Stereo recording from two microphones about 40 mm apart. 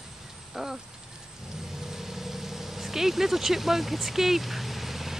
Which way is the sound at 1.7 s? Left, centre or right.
Centre.